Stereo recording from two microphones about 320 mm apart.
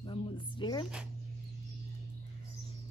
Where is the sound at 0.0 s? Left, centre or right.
Centre.